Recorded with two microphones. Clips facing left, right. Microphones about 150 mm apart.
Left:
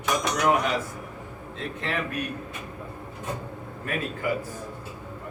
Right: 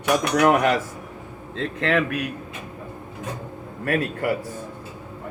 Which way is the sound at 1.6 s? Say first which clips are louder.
Right 8 dB; 90° right.